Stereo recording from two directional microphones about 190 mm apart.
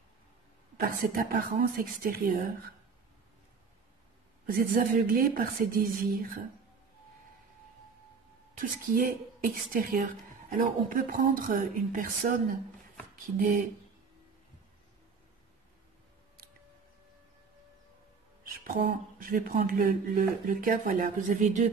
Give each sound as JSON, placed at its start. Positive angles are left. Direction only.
{"t": 0.8, "sound": "a woman's voice", "side_deg": -50}
{"t": 4.5, "sound": "a woman's voice", "side_deg": -50}
{"t": 8.5, "sound": "a woman's voice", "side_deg": -50}
{"t": 18.5, "sound": "a woman's voice", "side_deg": -50}